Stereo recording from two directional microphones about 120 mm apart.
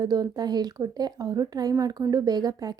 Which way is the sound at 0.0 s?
35° right (ahead or behind).